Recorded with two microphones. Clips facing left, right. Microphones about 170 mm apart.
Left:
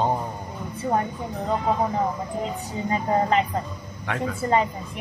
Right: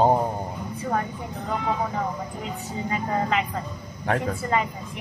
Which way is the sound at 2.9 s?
35° left (ahead or behind).